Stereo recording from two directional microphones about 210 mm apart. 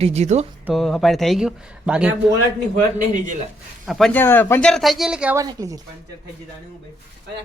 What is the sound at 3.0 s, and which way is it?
Speech, 35° right (ahead or behind).